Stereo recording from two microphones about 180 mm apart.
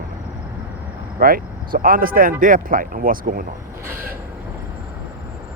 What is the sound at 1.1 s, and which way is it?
Speech, 55° right (ahead or behind).